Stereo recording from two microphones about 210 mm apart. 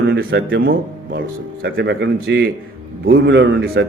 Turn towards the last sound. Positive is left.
turn(degrees=-60)  # may be behind; listen again after turning